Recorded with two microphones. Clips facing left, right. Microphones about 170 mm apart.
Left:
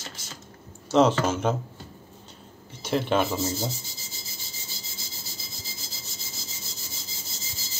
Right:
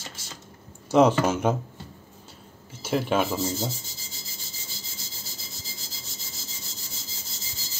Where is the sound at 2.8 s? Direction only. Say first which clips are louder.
Even; 5° right (ahead or behind).